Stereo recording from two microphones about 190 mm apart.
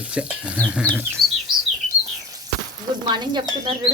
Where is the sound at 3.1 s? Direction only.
25° right (ahead or behind).